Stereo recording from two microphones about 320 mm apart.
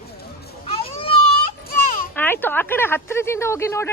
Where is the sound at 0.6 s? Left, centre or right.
Centre.